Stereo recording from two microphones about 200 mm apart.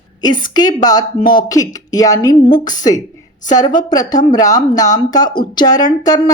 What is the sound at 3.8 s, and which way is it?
A woman's voice, 20° left (ahead or behind).